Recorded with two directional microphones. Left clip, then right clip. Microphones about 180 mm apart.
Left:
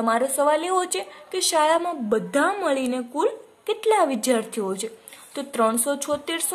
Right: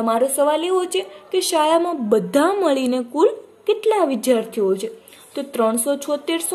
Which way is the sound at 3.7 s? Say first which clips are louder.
Right 3 dB; 35° left (ahead or behind).